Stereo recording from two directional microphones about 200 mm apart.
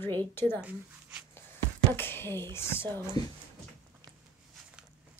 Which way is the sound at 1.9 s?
10° left (ahead or behind).